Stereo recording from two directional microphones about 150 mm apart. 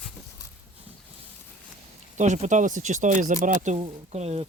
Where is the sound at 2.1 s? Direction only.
55° right (ahead or behind).